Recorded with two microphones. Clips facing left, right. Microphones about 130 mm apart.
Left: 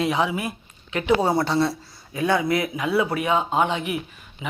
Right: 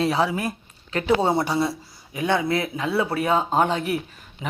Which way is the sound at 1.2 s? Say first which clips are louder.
Even; 20° right (ahead or behind).